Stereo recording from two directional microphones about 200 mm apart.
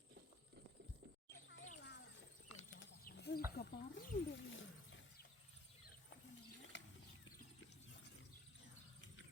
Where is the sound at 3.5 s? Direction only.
60° left (ahead or behind).